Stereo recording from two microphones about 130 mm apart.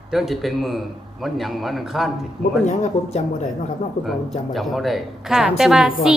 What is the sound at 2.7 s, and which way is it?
Speech, 65° left (ahead or behind).